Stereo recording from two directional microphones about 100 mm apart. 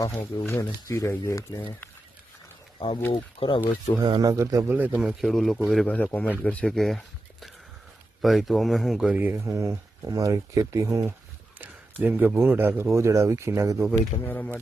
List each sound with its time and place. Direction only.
0.4 s speech: 25° left (ahead or behind)
2.7 s speech: 55° left (ahead or behind)
4.2 s speech: 35° right (ahead or behind)
4.7 s speech: 20° right (ahead or behind)
4.9 s speech: centre (ahead or behind)
5.9 s a man's voice: 15° left (ahead or behind)
8.2 s speech: centre (ahead or behind)
9.0 s speech: 20° right (ahead or behind)
9.4 s speech: 30° right (ahead or behind)
12.0 s speech: 20° right (ahead or behind)
14.3 s speech: 20° left (ahead or behind)